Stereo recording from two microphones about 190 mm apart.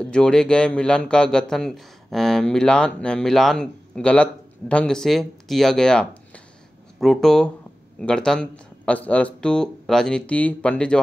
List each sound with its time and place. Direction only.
0.0 s a man's voice: 5° left (ahead or behind)